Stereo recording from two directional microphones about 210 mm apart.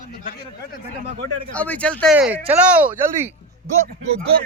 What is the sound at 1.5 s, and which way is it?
Speech, 5° left (ahead or behind).